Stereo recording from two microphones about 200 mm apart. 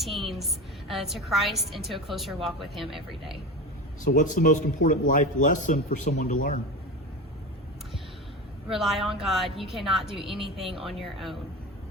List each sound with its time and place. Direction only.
0.0 s a woman's voice: centre (ahead or behind)
4.0 s a man's voice: 40° left (ahead or behind)
8.7 s a woman's voice: centre (ahead or behind)
10.2 s a woman's voice: 25° right (ahead or behind)
10.8 s a woman's voice: centre (ahead or behind)